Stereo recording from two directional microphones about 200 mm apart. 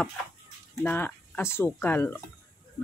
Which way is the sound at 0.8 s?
10° left (ahead or behind).